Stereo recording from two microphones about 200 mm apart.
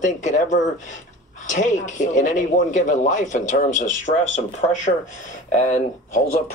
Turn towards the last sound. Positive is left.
turn(degrees=40)  # may be behind; listen again after turning